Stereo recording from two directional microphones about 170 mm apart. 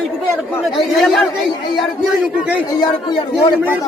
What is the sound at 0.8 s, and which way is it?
Speech, centre (ahead or behind).